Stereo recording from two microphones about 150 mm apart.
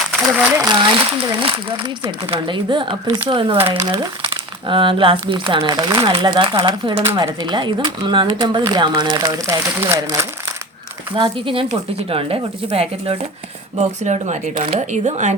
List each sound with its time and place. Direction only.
0.3 s speech: 10° right (ahead or behind)
0.6 s speech: 30° right (ahead or behind)
3.8 s speech: 20° right (ahead or behind)
4.7 s speech: 35° right (ahead or behind); by 10.2 s 15° right (ahead or behind)
11.1 s speech: 35° right (ahead or behind)
13.7 s speech: 50° right (ahead or behind)